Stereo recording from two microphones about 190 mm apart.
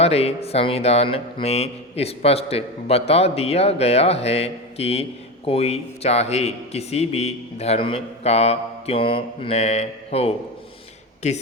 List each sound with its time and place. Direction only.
0.0 s speech: 35° left (ahead or behind)